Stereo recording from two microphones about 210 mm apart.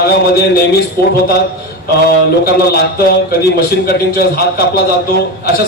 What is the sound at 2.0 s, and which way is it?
A man's voice, 45° left (ahead or behind).